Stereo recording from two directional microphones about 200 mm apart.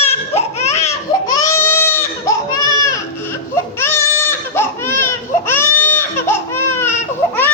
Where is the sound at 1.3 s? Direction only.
15° left (ahead or behind).